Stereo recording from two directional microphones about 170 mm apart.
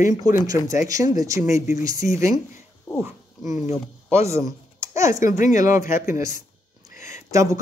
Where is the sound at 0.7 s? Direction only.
20° right (ahead or behind).